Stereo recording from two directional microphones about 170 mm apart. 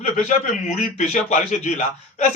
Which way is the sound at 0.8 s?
45° left (ahead or behind).